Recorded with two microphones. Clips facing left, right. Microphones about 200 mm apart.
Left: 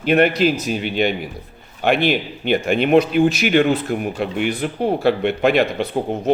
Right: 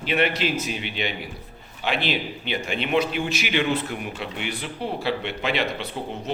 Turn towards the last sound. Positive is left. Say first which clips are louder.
# left 9 dB
turn(degrees=50)  # may be behind; listen again after turning